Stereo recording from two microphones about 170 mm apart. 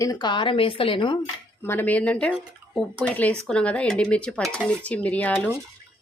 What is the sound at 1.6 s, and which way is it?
Speech, 10° left (ahead or behind).